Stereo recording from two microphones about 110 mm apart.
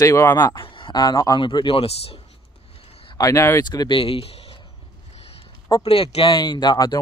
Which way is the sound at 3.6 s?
45° left (ahead or behind).